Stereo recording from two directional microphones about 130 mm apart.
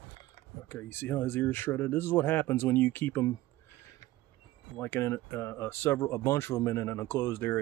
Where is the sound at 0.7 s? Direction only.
20° left (ahead or behind).